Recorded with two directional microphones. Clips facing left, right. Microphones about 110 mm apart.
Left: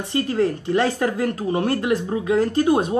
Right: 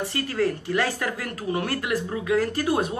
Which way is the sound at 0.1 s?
25° left (ahead or behind).